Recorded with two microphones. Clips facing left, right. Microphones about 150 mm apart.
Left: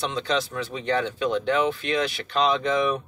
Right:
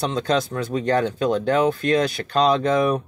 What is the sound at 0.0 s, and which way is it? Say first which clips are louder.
Speech: right 4 dB; 40° right (ahead or behind).